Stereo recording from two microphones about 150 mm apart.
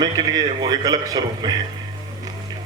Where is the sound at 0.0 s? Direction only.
25° right (ahead or behind).